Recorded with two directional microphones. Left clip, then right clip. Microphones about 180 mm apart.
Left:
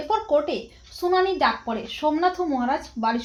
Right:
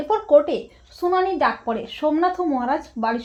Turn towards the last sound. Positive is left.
turn(degrees=-40)  # may be behind; listen again after turning